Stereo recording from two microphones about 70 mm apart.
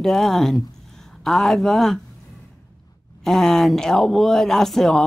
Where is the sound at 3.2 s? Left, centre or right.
Centre.